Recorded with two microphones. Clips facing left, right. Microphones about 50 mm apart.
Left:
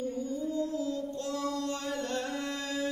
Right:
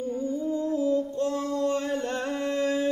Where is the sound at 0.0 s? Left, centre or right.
Right.